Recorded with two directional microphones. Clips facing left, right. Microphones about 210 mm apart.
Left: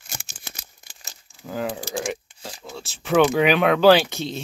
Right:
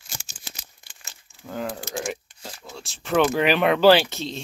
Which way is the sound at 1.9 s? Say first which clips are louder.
Left 2 dB; centre (ahead or behind).